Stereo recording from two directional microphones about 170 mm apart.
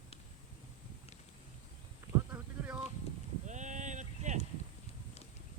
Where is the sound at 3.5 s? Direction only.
45° right (ahead or behind).